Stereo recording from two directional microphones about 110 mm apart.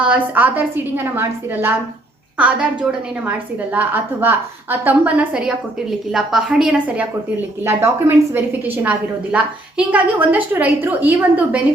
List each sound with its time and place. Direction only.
0.0 s a woman's voice: 15° right (ahead or behind)